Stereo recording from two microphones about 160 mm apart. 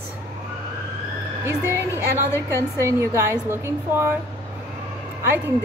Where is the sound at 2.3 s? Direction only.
15° left (ahead or behind).